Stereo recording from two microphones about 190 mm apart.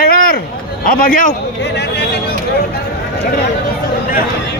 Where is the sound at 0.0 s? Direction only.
50° left (ahead or behind).